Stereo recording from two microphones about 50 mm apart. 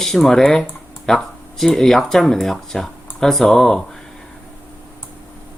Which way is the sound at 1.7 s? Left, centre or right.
Centre.